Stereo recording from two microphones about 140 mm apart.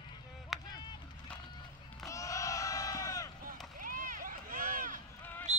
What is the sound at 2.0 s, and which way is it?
Crowd, 25° left (ahead or behind).